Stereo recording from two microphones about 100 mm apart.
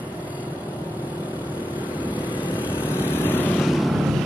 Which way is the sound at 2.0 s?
15° right (ahead or behind).